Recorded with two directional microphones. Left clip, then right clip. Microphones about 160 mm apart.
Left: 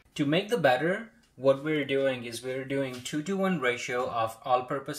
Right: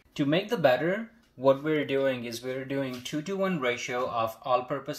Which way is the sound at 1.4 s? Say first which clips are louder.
Right 1 dB; 35° right (ahead or behind).